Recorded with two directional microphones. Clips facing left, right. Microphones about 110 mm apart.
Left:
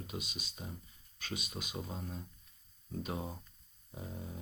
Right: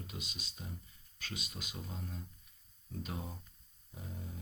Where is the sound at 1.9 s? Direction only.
30° left (ahead or behind).